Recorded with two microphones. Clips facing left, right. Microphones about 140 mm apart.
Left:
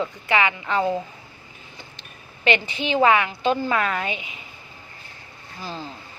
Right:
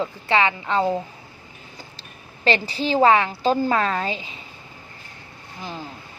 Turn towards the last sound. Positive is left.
turn(degrees=-15)  # may be behind; listen again after turning